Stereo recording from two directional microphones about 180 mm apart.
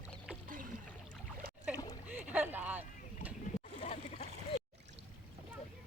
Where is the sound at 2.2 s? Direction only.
10° right (ahead or behind).